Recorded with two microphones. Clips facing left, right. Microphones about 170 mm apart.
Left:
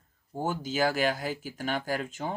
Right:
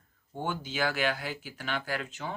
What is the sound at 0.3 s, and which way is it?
Speech, 40° left (ahead or behind).